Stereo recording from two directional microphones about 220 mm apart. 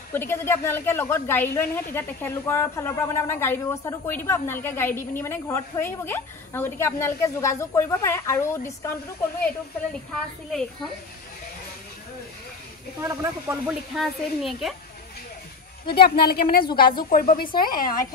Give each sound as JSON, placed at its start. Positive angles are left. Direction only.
{"t": 0.1, "sound": "a woman's voice", "side_deg": 10}
{"t": 13.0, "sound": "speech", "side_deg": -10}
{"t": 15.9, "sound": "speech", "side_deg": 45}